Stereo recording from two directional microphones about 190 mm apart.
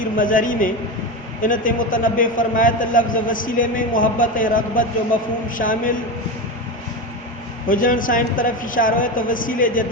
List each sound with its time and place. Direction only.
0.0 s a man's voice: 45° left (ahead or behind)
7.7 s a man's voice: 45° left (ahead or behind)